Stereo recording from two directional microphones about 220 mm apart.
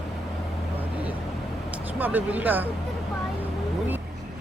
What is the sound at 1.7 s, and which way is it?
Speech, 10° right (ahead or behind).